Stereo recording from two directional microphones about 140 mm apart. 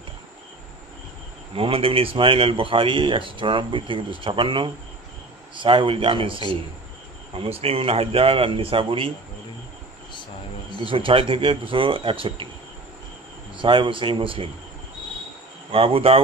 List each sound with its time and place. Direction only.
1.5 s speech: 40° right (ahead or behind)
10.8 s speech: 40° right (ahead or behind)
13.6 s speech: 35° right (ahead or behind)
15.7 s speech: 40° right (ahead or behind)